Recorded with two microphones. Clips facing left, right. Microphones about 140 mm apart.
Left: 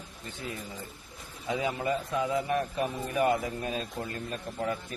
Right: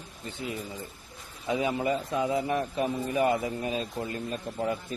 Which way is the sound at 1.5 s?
25° right (ahead or behind).